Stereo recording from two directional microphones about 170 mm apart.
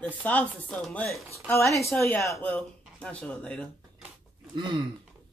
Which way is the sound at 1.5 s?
15° left (ahead or behind).